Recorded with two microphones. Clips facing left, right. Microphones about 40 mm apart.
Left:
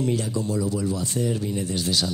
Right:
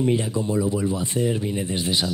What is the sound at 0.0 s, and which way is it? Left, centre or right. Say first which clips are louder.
Speech: right 3 dB; right.